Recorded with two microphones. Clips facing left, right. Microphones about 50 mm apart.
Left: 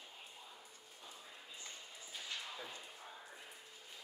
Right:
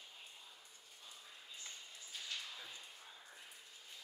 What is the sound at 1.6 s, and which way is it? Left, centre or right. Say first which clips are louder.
Ping: left 2 dB; centre.